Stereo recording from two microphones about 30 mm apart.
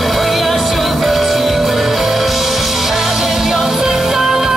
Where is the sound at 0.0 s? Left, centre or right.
Centre.